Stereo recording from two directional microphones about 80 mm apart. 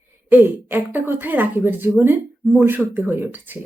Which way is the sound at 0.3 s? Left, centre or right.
Right.